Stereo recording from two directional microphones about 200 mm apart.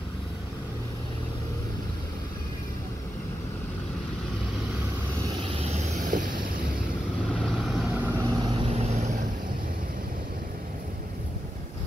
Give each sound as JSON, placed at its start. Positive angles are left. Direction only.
{"t": 5.6, "sound": "vehicle", "side_deg": -40}
{"t": 7.5, "sound": "vehicle", "side_deg": 0}
{"t": 8.4, "sound": "vehicle", "side_deg": -25}